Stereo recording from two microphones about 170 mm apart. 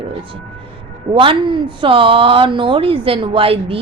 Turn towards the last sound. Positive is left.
turn(degrees=-35)  # may be behind; listen again after turning